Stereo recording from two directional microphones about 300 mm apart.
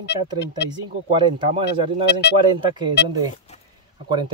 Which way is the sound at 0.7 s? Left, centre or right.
Centre.